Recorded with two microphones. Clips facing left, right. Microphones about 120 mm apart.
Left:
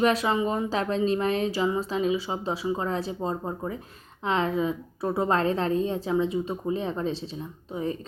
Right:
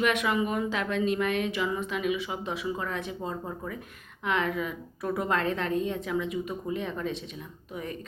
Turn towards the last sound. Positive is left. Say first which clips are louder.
# left 7 dB
turn(degrees=30)  # may be behind; listen again after turning